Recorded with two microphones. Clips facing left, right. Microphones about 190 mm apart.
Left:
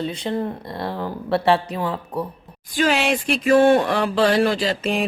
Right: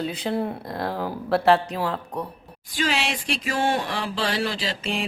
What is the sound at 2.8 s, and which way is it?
Speech, 55° left (ahead or behind).